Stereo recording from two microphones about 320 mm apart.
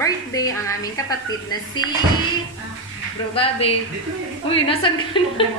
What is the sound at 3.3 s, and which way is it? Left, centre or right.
Speech, centre.